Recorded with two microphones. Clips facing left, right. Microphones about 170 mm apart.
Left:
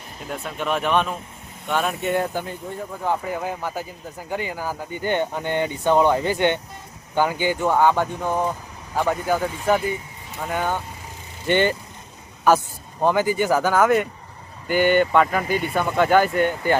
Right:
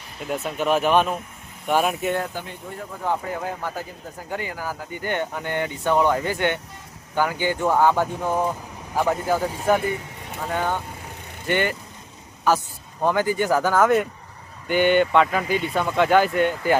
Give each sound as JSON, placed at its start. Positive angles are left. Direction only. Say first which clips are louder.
{"t": 0.3, "sound": "speech", "louder": "right 4 dB", "side_deg": -5}
{"t": 2.3, "sound": "speech", "louder": "left 5 dB", "side_deg": 45}
{"t": 3.0, "sound": "speech", "louder": "left 1 dB", "side_deg": 15}
{"t": 7.6, "sound": "speech", "louder": "even", "side_deg": -5}
{"t": 10.5, "sound": "speech", "louder": "even", "side_deg": 10}
{"t": 11.4, "sound": "speech", "louder": "left 4 dB", "side_deg": 25}
{"t": 13.1, "sound": "speech", "louder": "left 1 dB", "side_deg": 5}